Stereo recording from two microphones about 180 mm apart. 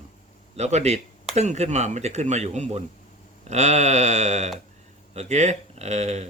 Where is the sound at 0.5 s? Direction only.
40° right (ahead or behind).